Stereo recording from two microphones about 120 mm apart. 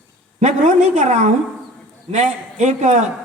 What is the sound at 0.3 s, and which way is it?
A woman's voice, 80° right.